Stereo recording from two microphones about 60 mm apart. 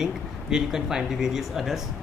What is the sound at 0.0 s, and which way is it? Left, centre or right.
Speech, centre.